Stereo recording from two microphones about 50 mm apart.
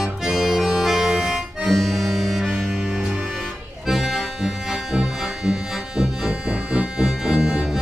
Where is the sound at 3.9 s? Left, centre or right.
Centre.